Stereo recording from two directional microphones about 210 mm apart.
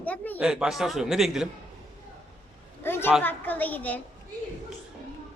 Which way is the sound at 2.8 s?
10° left (ahead or behind).